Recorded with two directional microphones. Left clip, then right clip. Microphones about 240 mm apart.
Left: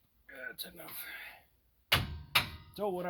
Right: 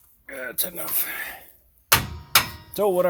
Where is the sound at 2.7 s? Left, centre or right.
Right.